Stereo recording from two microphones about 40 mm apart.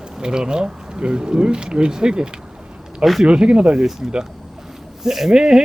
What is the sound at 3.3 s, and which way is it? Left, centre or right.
Speech, right.